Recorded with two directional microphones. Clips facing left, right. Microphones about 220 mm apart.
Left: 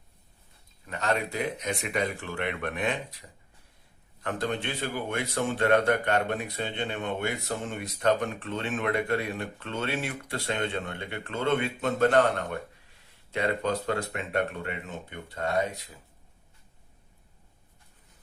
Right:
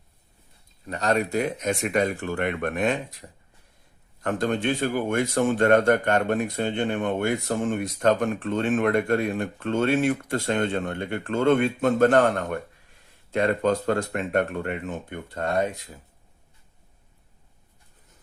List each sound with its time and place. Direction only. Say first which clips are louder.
0.9 s speech: right 5 dB; 35° right (ahead or behind)